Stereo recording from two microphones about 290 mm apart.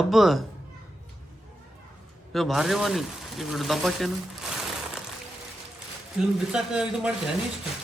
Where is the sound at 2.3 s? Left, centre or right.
Centre.